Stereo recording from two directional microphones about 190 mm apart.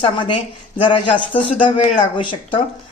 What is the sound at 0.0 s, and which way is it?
A woman's voice, 25° left (ahead or behind).